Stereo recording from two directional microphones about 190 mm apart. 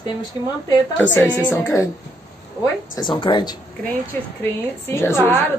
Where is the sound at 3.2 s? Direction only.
25° left (ahead or behind).